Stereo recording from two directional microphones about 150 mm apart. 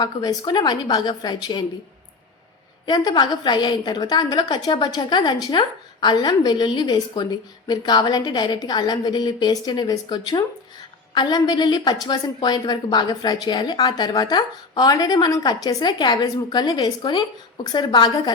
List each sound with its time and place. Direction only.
0.0 s a woman's voice: 25° left (ahead or behind)
2.8 s a woman's voice: 30° left (ahead or behind)